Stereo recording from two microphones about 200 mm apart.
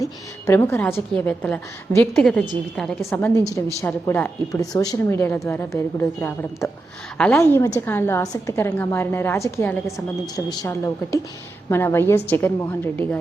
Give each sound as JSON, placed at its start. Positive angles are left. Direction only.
{"t": 0.0, "sound": "a woman's voice", "side_deg": 15}